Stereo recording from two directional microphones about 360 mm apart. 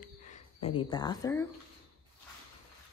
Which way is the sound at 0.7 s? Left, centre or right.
Centre.